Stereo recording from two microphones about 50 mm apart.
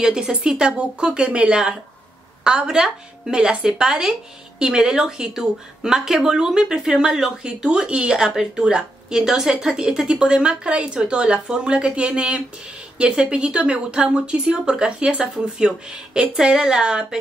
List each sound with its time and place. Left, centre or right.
0.0 s speech: centre